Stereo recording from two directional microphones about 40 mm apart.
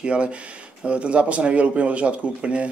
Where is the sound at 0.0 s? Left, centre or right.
Right.